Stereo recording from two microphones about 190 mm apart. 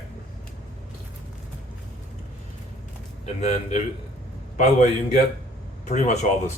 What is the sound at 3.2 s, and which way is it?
Speech, 35° left (ahead or behind).